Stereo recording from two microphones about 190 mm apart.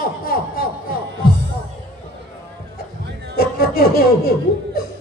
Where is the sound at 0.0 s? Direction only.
50° left (ahead or behind).